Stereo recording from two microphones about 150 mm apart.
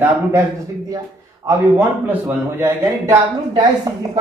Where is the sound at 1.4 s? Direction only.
15° right (ahead or behind).